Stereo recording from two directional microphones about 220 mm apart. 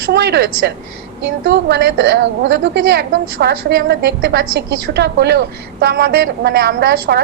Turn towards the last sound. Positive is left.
turn(degrees=-45)  # may be behind; listen again after turning